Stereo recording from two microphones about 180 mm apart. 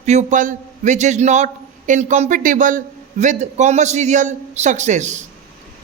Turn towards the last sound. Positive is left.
turn(degrees=-40)  # may be behind; listen again after turning